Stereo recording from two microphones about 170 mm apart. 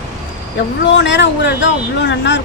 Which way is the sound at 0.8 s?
90° left.